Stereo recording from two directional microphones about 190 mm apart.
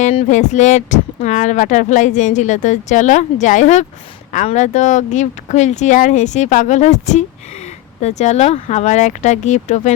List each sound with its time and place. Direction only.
0.0 s speech: 35° left (ahead or behind)